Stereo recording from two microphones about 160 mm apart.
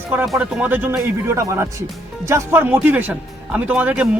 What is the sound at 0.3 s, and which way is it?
Speech, 5° right (ahead or behind).